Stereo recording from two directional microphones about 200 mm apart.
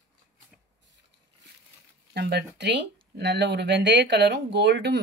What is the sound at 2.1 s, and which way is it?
Speech, 55° right (ahead or behind).